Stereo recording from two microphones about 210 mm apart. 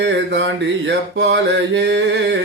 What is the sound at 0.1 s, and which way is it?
Music, 60° right (ahead or behind).